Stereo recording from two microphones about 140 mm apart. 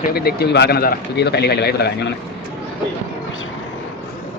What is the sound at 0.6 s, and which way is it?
Speech, 90° left.